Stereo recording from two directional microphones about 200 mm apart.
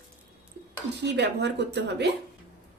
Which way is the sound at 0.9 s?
60° right (ahead or behind).